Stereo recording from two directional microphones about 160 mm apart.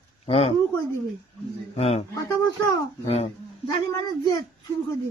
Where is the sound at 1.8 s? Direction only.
40° left (ahead or behind).